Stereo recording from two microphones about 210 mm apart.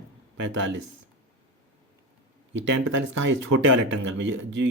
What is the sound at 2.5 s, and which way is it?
Speech, 60° right (ahead or behind).